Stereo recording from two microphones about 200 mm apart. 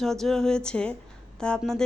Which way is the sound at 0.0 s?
Centre (ahead or behind).